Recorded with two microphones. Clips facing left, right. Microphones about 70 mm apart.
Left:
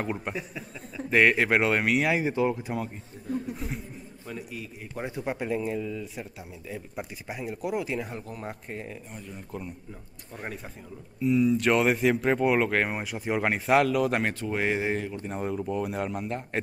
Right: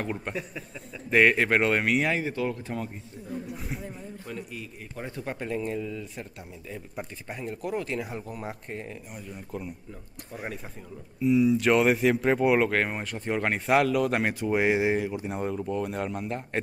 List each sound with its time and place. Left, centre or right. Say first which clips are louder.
0.0 s speech: even; centre
2.1 s speech: left 3 dB; centre
3.5 s speech: even; centre
4.9 s speech: left 3 dB; centre
14.4 s speech: right 4 dB; centre
15.3 s speech: left 2 dB; centre